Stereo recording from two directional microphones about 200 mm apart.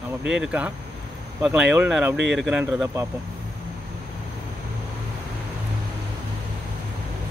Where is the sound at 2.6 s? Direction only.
15° right (ahead or behind).